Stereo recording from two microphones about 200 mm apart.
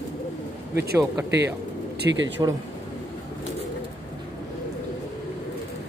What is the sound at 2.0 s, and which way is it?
Speech, 65° right (ahead or behind).